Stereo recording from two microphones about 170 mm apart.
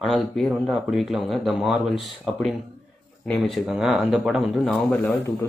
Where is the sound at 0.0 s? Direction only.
Centre (ahead or behind).